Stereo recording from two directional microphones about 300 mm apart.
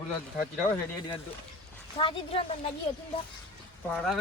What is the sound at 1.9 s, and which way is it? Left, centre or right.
Speech, centre.